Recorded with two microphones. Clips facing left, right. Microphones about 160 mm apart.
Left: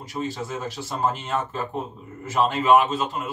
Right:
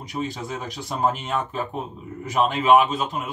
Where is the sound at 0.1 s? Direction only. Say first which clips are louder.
Even; 15° right (ahead or behind).